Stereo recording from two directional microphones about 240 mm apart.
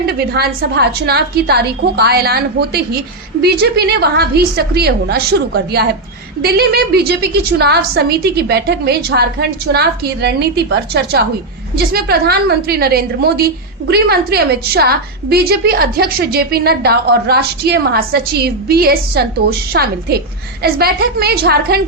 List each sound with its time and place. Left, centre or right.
0.3 s a woman's voice: right